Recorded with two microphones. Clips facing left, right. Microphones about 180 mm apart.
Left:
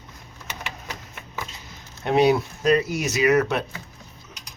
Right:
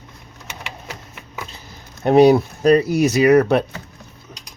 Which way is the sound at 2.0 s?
40° right (ahead or behind).